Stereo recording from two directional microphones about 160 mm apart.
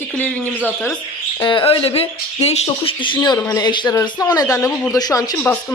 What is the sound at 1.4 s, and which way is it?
A man's voice, 30° left (ahead or behind).